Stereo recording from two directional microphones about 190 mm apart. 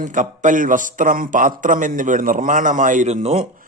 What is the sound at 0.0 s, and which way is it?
A man's voice, 40° right (ahead or behind).